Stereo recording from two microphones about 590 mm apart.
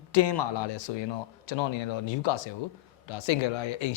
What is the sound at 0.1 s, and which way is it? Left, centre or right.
Speech, left.